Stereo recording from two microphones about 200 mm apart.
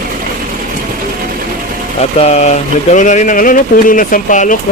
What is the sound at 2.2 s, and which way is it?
Speech, 35° left (ahead or behind).